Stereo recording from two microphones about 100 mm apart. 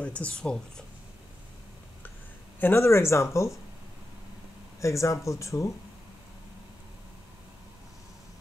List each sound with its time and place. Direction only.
0.0 s speech: 10° left (ahead or behind)
2.6 s speech: 25° left (ahead or behind)
4.7 s speech: 30° left (ahead or behind)